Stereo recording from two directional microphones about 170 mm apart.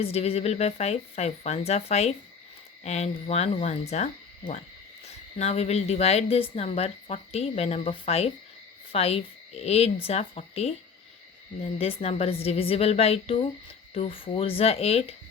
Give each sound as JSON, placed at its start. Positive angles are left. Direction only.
{"t": 0.0, "sound": "a woman's voice", "side_deg": 35}
{"t": 11.8, "sound": "a woman's voice", "side_deg": 35}